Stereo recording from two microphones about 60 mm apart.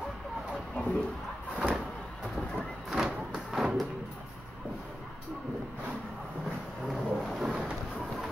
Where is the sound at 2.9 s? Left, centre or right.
Centre.